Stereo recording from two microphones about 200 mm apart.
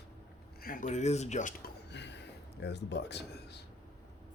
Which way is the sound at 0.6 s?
45° left (ahead or behind).